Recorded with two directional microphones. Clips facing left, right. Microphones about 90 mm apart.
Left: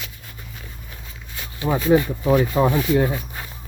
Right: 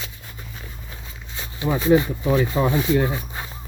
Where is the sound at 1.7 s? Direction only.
20° right (ahead or behind).